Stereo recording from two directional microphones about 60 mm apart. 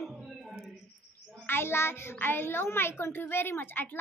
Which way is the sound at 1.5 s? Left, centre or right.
Left.